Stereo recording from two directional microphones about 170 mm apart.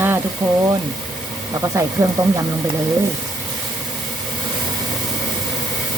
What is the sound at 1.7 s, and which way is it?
Speech, 20° right (ahead or behind).